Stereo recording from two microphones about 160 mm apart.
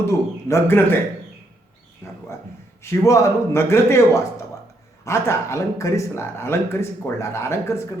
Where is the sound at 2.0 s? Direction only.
15° left (ahead or behind).